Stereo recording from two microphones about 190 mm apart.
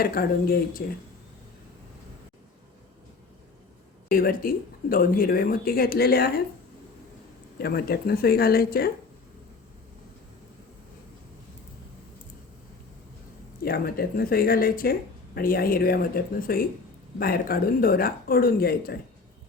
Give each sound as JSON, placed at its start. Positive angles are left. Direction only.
{"t": 0.0, "sound": "speech", "side_deg": 50}
{"t": 4.1, "sound": "speech", "side_deg": 50}
{"t": 7.6, "sound": "speech", "side_deg": 55}
{"t": 13.6, "sound": "speech", "side_deg": 50}